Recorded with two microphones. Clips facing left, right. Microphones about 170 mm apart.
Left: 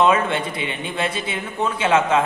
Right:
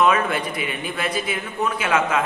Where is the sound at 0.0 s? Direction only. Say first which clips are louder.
Left 1 dB; 25° left (ahead or behind).